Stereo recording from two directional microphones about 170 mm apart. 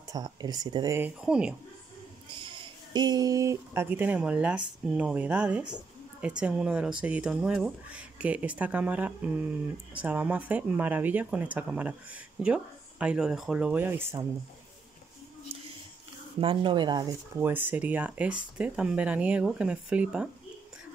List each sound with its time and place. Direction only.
0.1 s speech: 20° right (ahead or behind)
0.9 s speech: 10° right (ahead or behind)
2.4 s speech: 25° right (ahead or behind)
16.3 s speech: 30° right (ahead or behind)
17.4 s speech: 10° right (ahead or behind)